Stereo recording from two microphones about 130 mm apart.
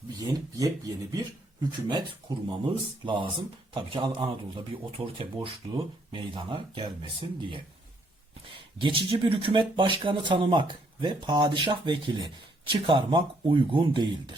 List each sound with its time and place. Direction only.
0.2 s speech: 30° right (ahead or behind)
8.8 s speech: 40° right (ahead or behind)